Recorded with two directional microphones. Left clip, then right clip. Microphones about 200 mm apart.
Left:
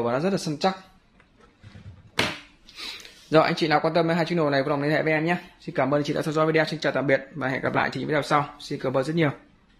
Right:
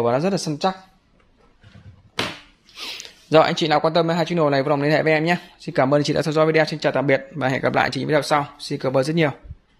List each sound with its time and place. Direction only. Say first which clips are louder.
0.0 s speech: right 5 dB; 40° right (ahead or behind)
2.7 s speech: right 4 dB; 35° right (ahead or behind)